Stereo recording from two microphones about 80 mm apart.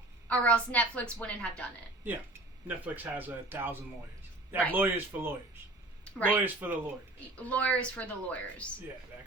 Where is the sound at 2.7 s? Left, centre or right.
Right.